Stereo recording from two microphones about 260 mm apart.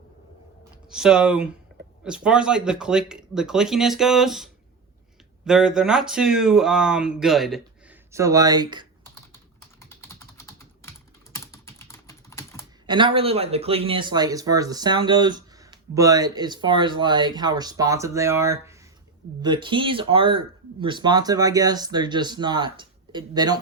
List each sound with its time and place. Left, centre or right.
0.9 s speech: centre
5.5 s speech: centre
8.1 s speech: centre
10.3 s typing: centre
12.9 s speech: centre